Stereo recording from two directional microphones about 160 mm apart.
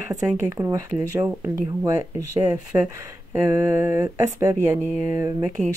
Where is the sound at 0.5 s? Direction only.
20° right (ahead or behind).